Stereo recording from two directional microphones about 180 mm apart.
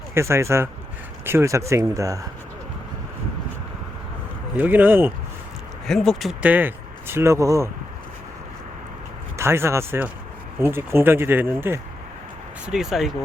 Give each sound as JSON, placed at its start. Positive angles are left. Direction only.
{"t": 0.1, "sound": "speech", "side_deg": -15}
{"t": 4.5, "sound": "speech", "side_deg": -10}
{"t": 5.9, "sound": "speech", "side_deg": 5}
{"t": 9.4, "sound": "speech", "side_deg": -15}
{"t": 12.6, "sound": "speech", "side_deg": 0}